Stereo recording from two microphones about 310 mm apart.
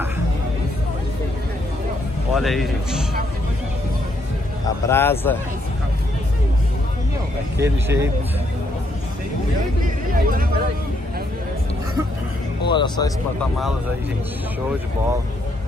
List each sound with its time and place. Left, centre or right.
2.3 s a man's voice: centre
4.8 s a man's voice: centre
7.5 s speech: centre
9.8 s speech: right
12.6 s a man's voice: centre